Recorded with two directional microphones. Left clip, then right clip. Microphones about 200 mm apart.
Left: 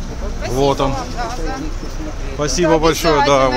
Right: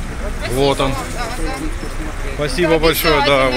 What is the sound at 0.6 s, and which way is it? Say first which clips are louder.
Speech: even; 10° left (ahead or behind).